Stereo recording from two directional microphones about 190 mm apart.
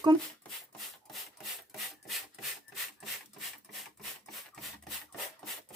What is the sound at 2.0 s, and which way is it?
Rub, centre (ahead or behind).